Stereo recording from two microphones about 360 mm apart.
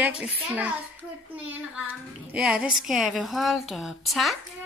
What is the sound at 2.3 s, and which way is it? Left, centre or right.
A woman's voice, centre.